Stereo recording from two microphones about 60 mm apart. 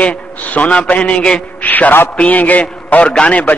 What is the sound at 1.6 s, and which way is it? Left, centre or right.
A man's voice, left.